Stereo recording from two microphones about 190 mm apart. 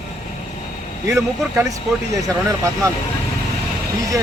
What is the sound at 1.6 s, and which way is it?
Speech, 15° right (ahead or behind).